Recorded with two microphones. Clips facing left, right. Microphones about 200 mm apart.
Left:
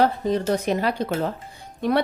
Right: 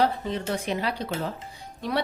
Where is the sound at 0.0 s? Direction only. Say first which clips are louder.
Left 5 dB; 45° left (ahead or behind).